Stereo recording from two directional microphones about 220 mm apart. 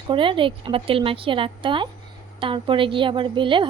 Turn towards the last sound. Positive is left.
turn(degrees=-20)  # may be behind; listen again after turning